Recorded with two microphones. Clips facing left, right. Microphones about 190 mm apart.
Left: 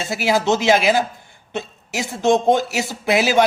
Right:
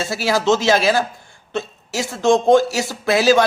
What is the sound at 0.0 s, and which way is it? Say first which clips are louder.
Speech: even; 15° left (ahead or behind).